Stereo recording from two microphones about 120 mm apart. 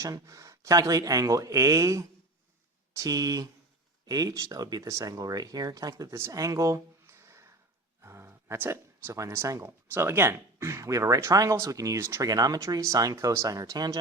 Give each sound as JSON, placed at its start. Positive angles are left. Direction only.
{"t": 0.0, "sound": "speech", "side_deg": -25}